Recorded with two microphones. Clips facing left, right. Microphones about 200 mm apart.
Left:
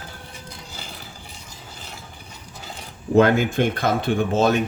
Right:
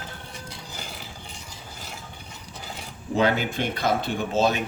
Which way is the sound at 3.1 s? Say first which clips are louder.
Left 7 dB; 50° left (ahead or behind).